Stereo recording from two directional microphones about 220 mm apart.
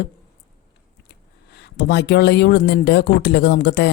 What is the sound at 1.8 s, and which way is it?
Speech, 50° left (ahead or behind).